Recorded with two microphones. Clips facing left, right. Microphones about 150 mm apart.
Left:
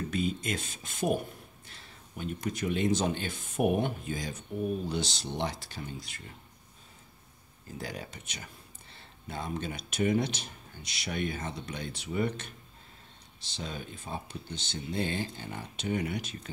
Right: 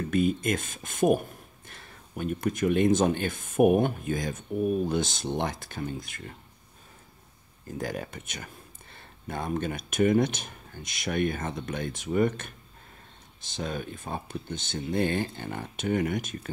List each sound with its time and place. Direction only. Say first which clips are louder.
0.1 s speech: right 9 dB; 50° right (ahead or behind)
1.7 s a sound: right 5 dB; 50° right (ahead or behind)
2.4 s speech: right 6 dB; 50° right (ahead or behind)
7.7 s speech: right 6 dB; 50° right (ahead or behind)
13.6 s speech: right 6 dB; 50° right (ahead or behind)